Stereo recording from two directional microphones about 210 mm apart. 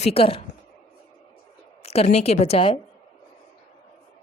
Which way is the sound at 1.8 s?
30° left (ahead or behind).